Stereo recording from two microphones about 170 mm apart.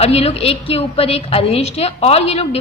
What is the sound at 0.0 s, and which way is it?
A woman's voice, 35° left (ahead or behind).